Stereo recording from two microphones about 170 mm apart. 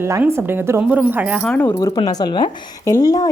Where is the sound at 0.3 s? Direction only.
10° right (ahead or behind).